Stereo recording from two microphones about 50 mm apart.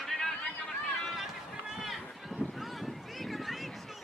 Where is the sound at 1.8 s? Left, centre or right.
Centre.